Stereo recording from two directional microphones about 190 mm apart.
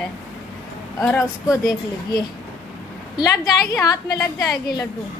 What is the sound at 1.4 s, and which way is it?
A woman's voice, 20° left (ahead or behind).